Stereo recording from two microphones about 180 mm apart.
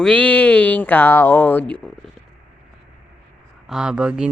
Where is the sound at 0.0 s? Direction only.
5° left (ahead or behind).